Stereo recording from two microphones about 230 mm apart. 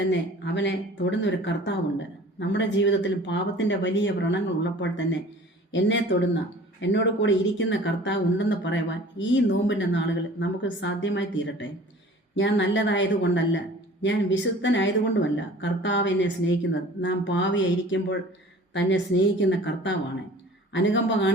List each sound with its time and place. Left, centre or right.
0.1 s speech: left
6.8 s speech: left